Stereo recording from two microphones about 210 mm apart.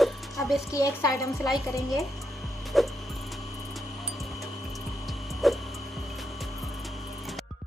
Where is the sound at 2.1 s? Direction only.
Centre (ahead or behind).